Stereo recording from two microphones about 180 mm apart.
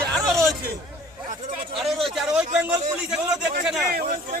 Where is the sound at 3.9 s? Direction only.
55° right (ahead or behind).